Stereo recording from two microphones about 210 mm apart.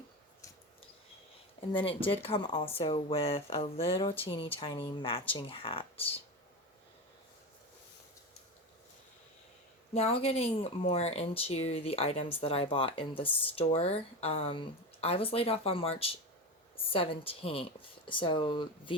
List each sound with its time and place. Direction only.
1.7 s speech: 25° left (ahead or behind)
9.9 s speech: 30° left (ahead or behind)